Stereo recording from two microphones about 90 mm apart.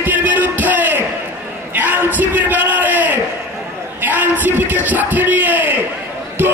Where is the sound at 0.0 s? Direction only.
20° right (ahead or behind).